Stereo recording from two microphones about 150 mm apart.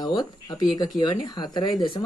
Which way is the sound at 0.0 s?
30° left (ahead or behind).